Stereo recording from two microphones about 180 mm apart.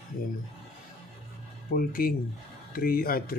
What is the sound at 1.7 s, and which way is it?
Speech, 55° left (ahead or behind).